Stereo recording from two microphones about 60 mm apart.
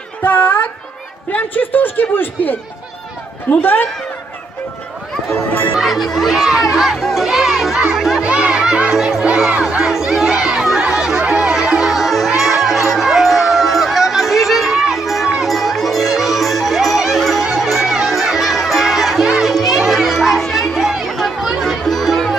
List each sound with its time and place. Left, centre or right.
0.2 s a man's voice: left
3.6 s a man's voice: left
5.3 s a man's voice: left
5.8 s speech: centre
7.9 s music: centre
8.2 s music: centre
10.8 s chatter: centre
11.3 s music: centre